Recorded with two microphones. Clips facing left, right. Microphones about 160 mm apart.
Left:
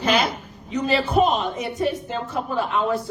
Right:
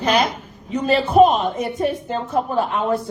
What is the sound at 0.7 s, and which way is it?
Speech, 50° right (ahead or behind).